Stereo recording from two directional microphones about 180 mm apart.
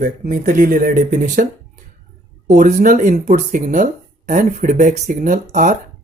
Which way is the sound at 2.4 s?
45° right (ahead or behind).